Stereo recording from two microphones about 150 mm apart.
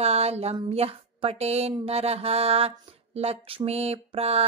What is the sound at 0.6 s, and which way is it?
Speech, 40° right (ahead or behind).